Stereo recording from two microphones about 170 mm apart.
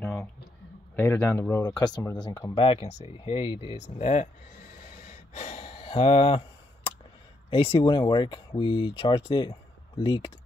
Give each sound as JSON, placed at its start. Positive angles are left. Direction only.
{"t": 0.9, "sound": "a man's voice", "side_deg": 10}
{"t": 1.6, "sound": "speech", "side_deg": 25}
{"t": 5.0, "sound": "a sound", "side_deg": 40}
{"t": 7.4, "sound": "speech", "side_deg": 30}